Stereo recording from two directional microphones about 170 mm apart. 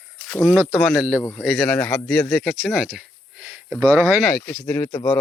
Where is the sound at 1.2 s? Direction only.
15° left (ahead or behind).